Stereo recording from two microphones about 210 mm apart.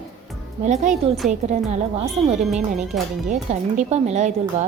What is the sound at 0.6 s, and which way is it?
A woman's voice, 35° right (ahead or behind).